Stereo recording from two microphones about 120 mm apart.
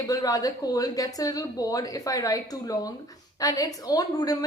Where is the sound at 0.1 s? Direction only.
30° left (ahead or behind).